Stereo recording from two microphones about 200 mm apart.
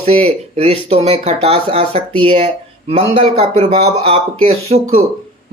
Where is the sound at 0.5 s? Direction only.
30° right (ahead or behind).